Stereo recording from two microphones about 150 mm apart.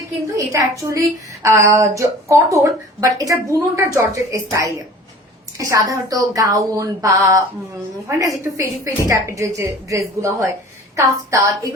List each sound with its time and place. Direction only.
0.3 s a woman's voice: 20° right (ahead or behind)